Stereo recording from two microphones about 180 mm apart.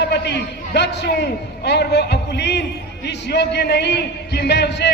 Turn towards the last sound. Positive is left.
turn(degrees=70)  # may be behind; listen again after turning